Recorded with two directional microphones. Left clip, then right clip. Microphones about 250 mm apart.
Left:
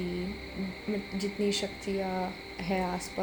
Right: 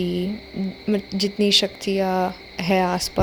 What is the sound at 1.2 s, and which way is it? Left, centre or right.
Speech, right.